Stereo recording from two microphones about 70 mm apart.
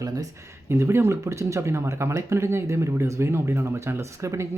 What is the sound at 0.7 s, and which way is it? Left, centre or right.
Speech, right.